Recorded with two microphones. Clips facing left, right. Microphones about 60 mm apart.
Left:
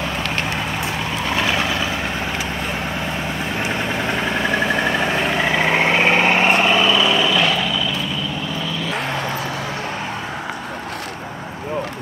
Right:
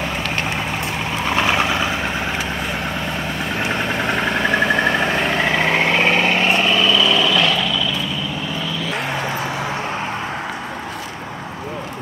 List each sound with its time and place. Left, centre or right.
1.3 s vehicle: right
3.6 s vehicle: centre
5.3 s vehicle: centre